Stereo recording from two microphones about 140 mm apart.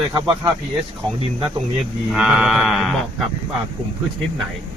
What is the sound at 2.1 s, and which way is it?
Speech, 5° right (ahead or behind).